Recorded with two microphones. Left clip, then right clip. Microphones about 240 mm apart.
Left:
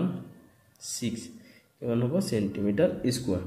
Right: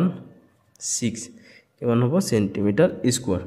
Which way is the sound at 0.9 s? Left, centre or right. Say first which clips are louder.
Right 5 dB; right.